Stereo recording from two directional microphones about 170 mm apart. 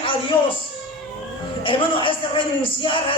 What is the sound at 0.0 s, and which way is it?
Music, 30° left (ahead or behind).